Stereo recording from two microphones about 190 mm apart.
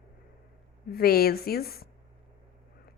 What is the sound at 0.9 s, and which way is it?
Speech, 55° left (ahead or behind).